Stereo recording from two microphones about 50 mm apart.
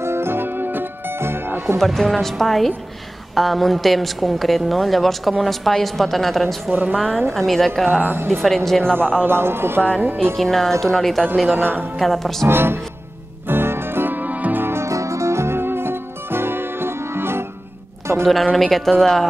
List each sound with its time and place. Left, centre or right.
0.0 s music: right
1.8 s a woman's voice: centre
6.9 s speech: centre
8.0 s speech: right
8.3 s a woman's voice: centre
9.2 s speech: right
10.3 s a woman's voice: centre
11.6 s speech: right
12.0 s a woman's voice: centre
12.4 s speech: right
13.5 s music: right
14.6 s music: right
18.2 s speech: centre